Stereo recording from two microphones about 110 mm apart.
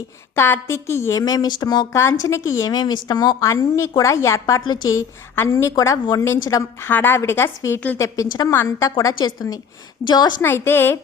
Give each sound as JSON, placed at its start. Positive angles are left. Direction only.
{"t": 0.3, "sound": "a woman's voice", "side_deg": 20}
{"t": 1.2, "sound": "speech", "side_deg": 35}
{"t": 1.9, "sound": "a woman's voice", "side_deg": 25}
{"t": 4.6, "sound": "speech", "side_deg": 40}
{"t": 4.9, "sound": "a woman's voice", "side_deg": 25}
{"t": 8.3, "sound": "speech", "side_deg": 40}
{"t": 10.4, "sound": "a woman's voice", "side_deg": 20}